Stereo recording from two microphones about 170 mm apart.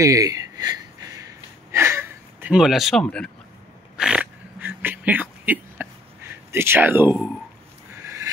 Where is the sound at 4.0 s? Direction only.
5° right (ahead or behind).